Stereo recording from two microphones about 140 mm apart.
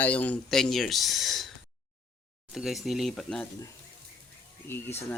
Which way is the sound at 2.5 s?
Centre (ahead or behind).